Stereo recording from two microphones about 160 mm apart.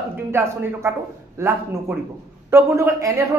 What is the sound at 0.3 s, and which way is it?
A man's voice, 15° right (ahead or behind).